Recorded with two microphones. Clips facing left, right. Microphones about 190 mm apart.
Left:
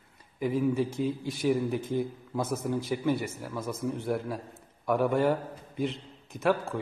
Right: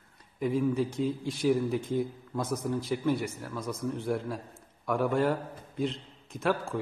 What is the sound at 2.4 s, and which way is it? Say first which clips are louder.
Speech: right 1 dB; 25° left (ahead or behind).